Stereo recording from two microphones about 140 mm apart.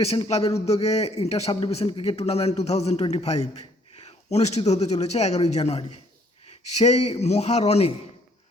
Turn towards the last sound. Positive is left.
turn(degrees=50)  # may be behind; listen again after turning